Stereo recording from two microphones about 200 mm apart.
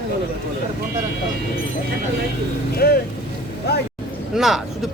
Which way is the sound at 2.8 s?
55° left (ahead or behind).